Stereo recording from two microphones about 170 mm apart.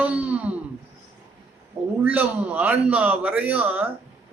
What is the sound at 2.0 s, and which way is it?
A man's voice, 10° right (ahead or behind).